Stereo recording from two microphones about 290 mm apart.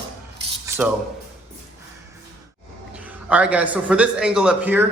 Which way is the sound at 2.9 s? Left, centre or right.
Centre.